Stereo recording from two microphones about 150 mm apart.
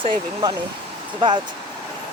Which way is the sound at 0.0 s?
35° right (ahead or behind).